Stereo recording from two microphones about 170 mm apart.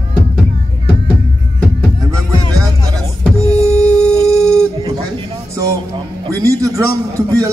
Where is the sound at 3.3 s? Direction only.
20° right (ahead or behind).